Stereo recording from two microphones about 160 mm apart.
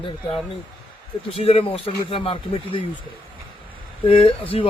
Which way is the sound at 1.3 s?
40° left (ahead or behind).